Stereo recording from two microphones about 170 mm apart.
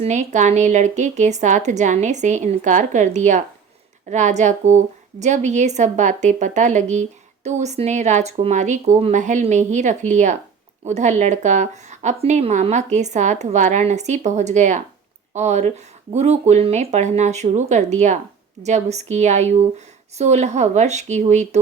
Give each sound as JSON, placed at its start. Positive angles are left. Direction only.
{"t": 0.0, "sound": "a woman's voice", "side_deg": -40}